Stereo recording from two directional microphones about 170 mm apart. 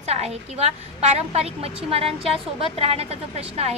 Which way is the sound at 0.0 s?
40° right (ahead or behind).